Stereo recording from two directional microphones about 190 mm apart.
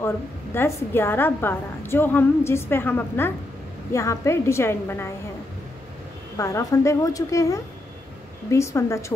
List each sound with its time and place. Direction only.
0.6 s a woman's voice: 10° left (ahead or behind)
6.3 s a woman's voice: 15° left (ahead or behind)